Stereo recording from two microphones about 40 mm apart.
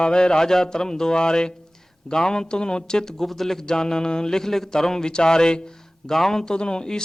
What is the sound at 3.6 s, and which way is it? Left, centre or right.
Speech, centre.